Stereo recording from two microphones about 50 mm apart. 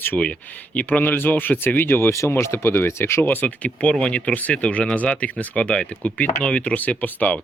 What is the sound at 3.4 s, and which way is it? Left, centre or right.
Speech, left.